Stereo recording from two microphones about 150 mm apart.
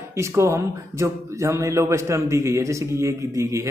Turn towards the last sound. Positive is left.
turn(degrees=-20)  # may be behind; listen again after turning